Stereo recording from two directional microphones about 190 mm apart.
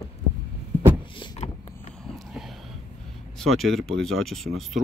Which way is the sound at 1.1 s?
25° left (ahead or behind).